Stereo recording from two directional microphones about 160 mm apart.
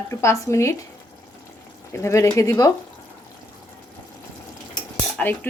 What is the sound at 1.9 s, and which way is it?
Speech, 20° left (ahead or behind).